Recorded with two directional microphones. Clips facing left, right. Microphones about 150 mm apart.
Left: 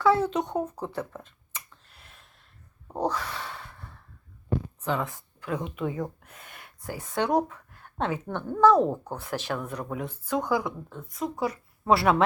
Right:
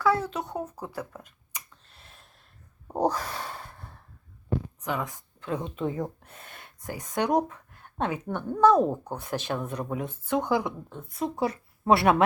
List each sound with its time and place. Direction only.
0.0 s speech: centre (ahead or behind)
2.8 s a sound: 20° right (ahead or behind)
3.1 s snort: 40° right (ahead or behind)
4.8 s a woman's voice: 15° right (ahead or behind)